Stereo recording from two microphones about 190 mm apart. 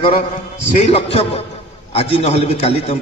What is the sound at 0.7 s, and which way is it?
A man's voice, 35° left (ahead or behind).